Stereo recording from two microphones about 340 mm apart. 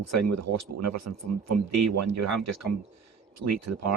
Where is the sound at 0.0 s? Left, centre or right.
Right.